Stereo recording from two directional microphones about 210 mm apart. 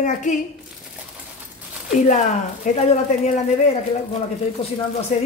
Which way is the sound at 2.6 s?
35° left (ahead or behind).